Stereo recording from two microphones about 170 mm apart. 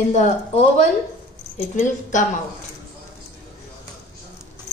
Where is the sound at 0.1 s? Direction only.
40° left (ahead or behind).